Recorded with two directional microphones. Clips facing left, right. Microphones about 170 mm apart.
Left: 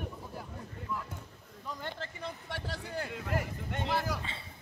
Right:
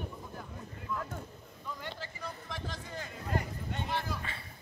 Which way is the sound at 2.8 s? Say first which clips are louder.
Left 4 dB; 75° left (ahead or behind).